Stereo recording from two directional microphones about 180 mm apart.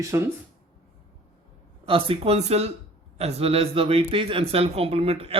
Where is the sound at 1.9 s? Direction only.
30° right (ahead or behind).